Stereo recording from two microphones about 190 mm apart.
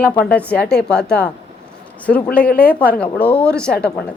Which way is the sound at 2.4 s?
50° left (ahead or behind).